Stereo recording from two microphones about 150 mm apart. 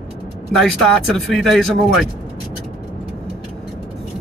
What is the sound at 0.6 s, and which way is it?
Speech, centre (ahead or behind).